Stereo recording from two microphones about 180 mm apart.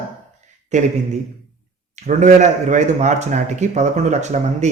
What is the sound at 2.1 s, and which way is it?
A man's voice, 40° right (ahead or behind).